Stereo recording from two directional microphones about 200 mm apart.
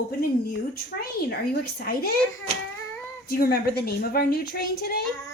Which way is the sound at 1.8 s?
50° left (ahead or behind).